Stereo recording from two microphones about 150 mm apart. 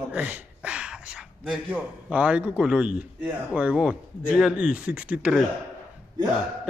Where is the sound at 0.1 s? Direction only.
10° right (ahead or behind).